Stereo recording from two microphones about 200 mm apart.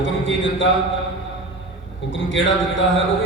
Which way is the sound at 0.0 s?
70° left (ahead or behind).